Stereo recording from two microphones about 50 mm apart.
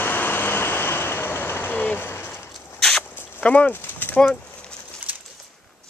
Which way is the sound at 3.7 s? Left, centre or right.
Left.